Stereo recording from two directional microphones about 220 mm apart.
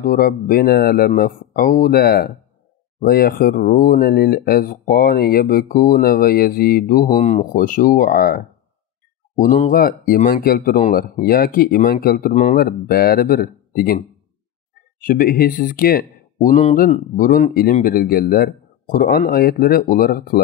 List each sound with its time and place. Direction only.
0.0 s speech: 40° left (ahead or behind)
9.4 s speech: 40° left (ahead or behind)
15.0 s speech: 40° left (ahead or behind)